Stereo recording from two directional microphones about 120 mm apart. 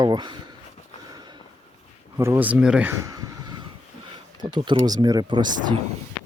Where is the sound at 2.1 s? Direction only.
20° right (ahead or behind).